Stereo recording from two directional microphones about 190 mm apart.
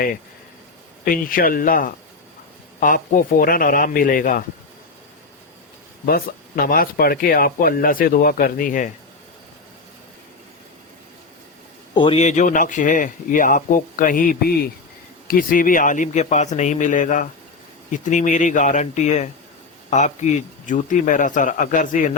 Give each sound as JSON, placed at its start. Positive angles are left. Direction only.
{"t": 1.0, "sound": "speech", "side_deg": 50}
{"t": 6.1, "sound": "speech", "side_deg": 50}
{"t": 11.9, "sound": "speech", "side_deg": 30}